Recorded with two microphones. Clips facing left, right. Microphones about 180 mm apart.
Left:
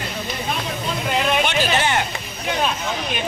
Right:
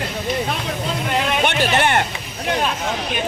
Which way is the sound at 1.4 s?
60° right (ahead or behind).